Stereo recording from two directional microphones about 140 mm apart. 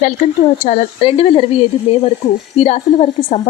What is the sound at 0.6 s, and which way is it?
A woman's voice, 50° left (ahead or behind).